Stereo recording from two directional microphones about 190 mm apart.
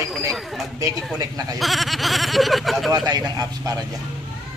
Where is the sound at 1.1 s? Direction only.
20° right (ahead or behind).